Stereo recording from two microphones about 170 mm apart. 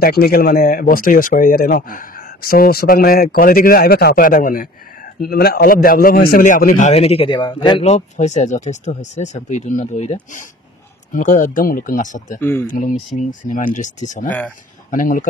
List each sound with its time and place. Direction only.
0.0 s speech: 65° left (ahead or behind)
5.3 s speech: 65° left (ahead or behind)
6.9 s speech: 35° left (ahead or behind)
7.8 s speech: 40° left (ahead or behind)
12.4 s speech: 10° left (ahead or behind)
12.6 s speech: 50° left (ahead or behind)